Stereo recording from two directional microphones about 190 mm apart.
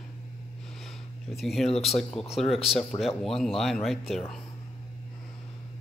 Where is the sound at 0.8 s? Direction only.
Centre (ahead or behind).